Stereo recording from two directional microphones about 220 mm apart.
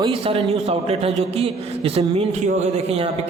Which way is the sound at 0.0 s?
25° right (ahead or behind).